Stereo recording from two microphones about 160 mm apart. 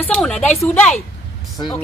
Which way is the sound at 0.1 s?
5° left (ahead or behind).